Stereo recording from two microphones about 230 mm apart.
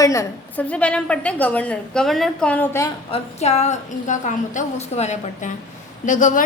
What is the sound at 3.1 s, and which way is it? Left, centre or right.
A woman's voice, left.